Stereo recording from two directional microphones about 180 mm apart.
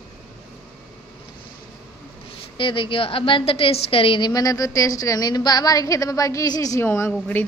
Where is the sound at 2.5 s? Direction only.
30° left (ahead or behind).